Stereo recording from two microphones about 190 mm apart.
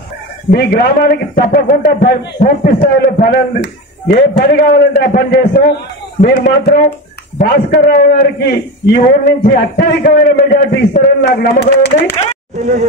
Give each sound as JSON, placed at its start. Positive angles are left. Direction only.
{"t": 0.5, "sound": "a man's voice", "side_deg": 50}